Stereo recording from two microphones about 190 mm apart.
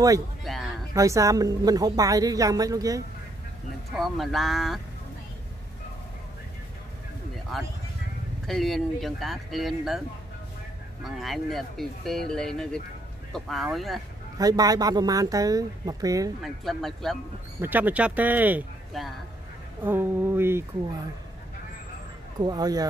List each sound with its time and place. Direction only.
0.4 s a sound: centre (ahead or behind)
0.9 s speech: 15° right (ahead or behind)
3.9 s speech: centre (ahead or behind)
7.5 s speech: centre (ahead or behind)
11.1 s speech: centre (ahead or behind)
14.4 s speech: 20° right (ahead or behind)
16.4 s speech: centre (ahead or behind)
17.6 s speech: 10° right (ahead or behind)
22.4 s speech: 20° right (ahead or behind)